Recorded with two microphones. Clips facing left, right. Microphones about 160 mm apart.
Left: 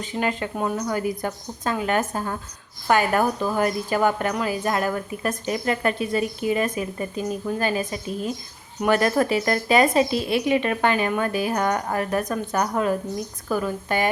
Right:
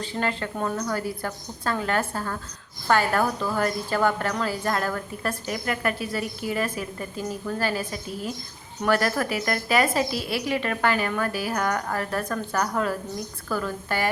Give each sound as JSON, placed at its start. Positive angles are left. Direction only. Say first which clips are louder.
{"t": 0.0, "sound": "speech", "louder": "left 2 dB", "side_deg": 15}